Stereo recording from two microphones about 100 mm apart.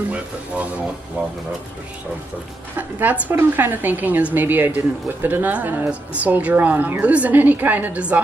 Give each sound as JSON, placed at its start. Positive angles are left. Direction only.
{"t": 2.7, "sound": "a woman's voice", "side_deg": -15}